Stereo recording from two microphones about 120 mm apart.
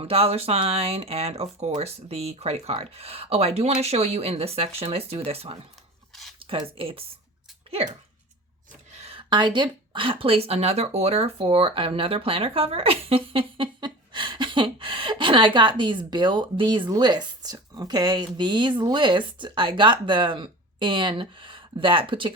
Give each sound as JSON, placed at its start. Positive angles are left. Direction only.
{"t": 0.0, "sound": "speech", "side_deg": -55}
{"t": 8.9, "sound": "a sound", "side_deg": -65}
{"t": 9.1, "sound": "speech", "side_deg": -40}